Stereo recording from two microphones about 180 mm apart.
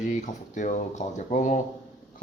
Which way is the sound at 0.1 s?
45° left (ahead or behind).